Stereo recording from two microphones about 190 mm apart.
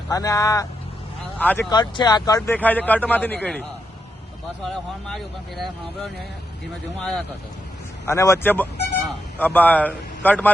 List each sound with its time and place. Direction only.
0.1 s a man's voice: 20° left (ahead or behind)
1.7 s speech: 20° left (ahead or behind)
2.6 s a man's voice: 10° left (ahead or behind)
8.0 s a man's voice: 15° left (ahead or behind)